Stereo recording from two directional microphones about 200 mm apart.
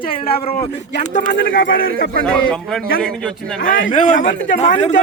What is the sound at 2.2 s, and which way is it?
Speech, centre (ahead or behind).